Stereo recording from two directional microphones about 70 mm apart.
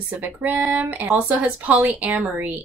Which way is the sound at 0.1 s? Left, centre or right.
Right.